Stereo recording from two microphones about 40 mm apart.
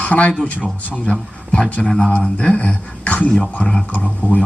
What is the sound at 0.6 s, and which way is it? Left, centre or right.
Speech, right.